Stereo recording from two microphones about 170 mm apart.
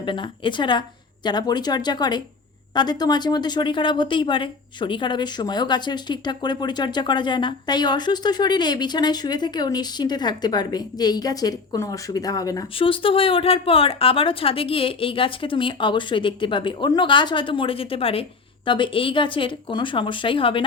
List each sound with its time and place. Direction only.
0.0 s speech: 30° left (ahead or behind)
12.7 s speech: 30° left (ahead or behind)